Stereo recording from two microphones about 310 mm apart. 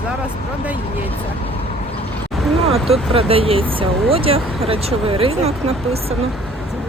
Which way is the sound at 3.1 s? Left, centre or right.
Centre.